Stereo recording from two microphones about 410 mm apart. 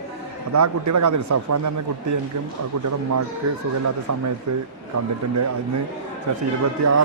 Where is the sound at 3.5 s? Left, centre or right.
Right.